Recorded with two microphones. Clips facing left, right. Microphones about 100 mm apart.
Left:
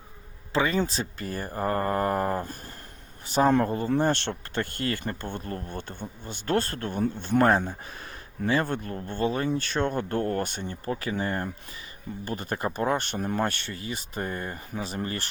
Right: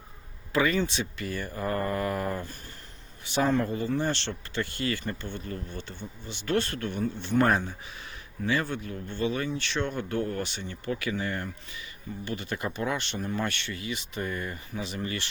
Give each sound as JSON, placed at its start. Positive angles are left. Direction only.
{"t": 0.5, "sound": "speech", "side_deg": 30}
{"t": 0.8, "sound": "speech", "side_deg": 40}